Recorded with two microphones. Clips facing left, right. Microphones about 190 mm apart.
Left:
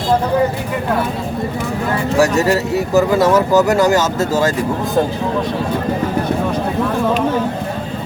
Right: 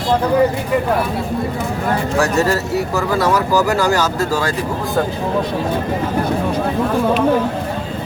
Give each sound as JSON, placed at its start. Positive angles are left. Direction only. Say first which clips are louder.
{"t": 2.1, "sound": "speech", "louder": "left 4 dB", "side_deg": 15}